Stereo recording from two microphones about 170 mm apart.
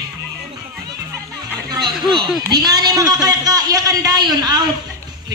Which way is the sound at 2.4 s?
25° right (ahead or behind).